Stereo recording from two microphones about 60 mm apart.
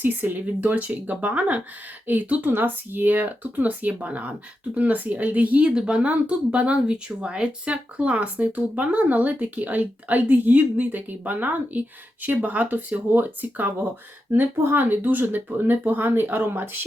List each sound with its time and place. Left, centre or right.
0.0 s speech: right